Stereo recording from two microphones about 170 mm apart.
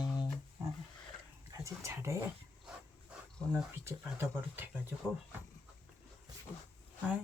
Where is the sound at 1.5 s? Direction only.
15° right (ahead or behind).